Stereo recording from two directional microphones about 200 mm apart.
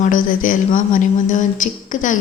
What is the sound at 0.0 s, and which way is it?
A woman's voice, 40° left (ahead or behind).